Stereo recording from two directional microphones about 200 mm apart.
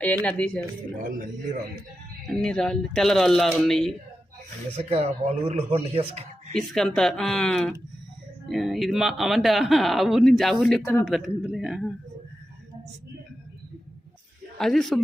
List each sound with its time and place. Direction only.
0.0 s a woman's voice: 5° left (ahead or behind)
0.9 s a man's voice: 45° right (ahead or behind)
2.3 s speech: centre (ahead or behind)
4.8 s speech: 30° right (ahead or behind)
6.5 s speech: 5° left (ahead or behind)
14.6 s speech: centre (ahead or behind)